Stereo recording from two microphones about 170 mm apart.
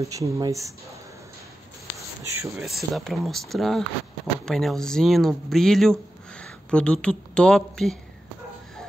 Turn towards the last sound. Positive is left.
turn(degrees=5)  # may be behind; listen again after turning